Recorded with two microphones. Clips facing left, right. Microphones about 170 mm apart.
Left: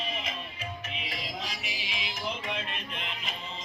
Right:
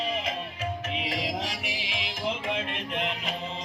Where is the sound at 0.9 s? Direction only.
90° right.